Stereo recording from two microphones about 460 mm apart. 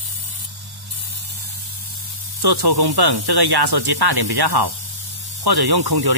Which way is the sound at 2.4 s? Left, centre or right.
Right.